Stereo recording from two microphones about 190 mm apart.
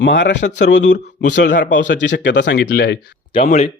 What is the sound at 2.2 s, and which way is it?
Speech, 70° left (ahead or behind).